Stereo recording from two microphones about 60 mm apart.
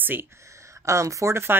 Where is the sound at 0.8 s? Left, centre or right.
Right.